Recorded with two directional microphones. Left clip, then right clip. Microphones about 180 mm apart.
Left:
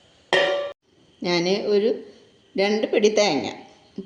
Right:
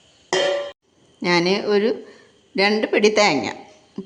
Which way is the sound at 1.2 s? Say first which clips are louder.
Right 3 dB; 25° right (ahead or behind).